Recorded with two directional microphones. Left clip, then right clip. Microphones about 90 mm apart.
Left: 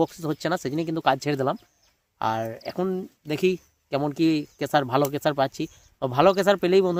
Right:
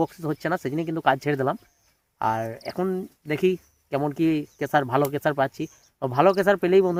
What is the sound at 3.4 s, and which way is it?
Speech, 35° left (ahead or behind).